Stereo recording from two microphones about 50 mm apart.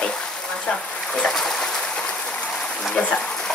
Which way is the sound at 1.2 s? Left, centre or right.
Centre.